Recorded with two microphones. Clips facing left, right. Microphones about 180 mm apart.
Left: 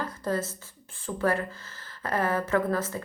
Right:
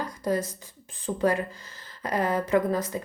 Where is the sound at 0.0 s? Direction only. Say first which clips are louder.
Right 2 dB; 15° right (ahead or behind).